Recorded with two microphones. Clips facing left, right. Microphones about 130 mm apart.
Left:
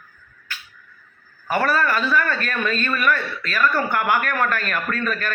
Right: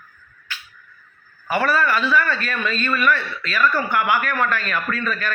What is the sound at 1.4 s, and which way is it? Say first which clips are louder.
A man's voice: even; 45° left (ahead or behind).